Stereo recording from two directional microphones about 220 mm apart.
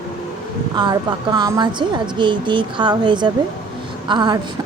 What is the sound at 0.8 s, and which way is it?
Speech, 20° right (ahead or behind).